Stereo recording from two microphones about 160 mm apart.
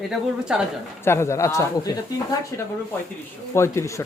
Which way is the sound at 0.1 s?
5° right (ahead or behind).